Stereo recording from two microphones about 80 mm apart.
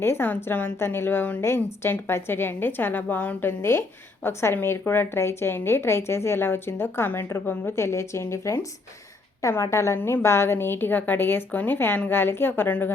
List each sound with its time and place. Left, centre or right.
0.0 s a woman's voice: left